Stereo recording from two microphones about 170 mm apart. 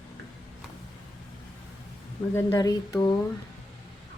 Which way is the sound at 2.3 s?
20° left (ahead or behind).